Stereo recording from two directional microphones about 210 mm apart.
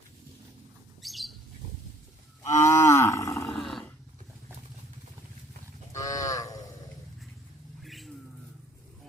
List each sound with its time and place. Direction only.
1.0 s squawk: centre (ahead or behind)
2.4 s livestock: 15° left (ahead or behind)
3.6 s roar: centre (ahead or behind)
5.9 s cattle: 15° left (ahead or behind)
7.8 s bird: centre (ahead or behind)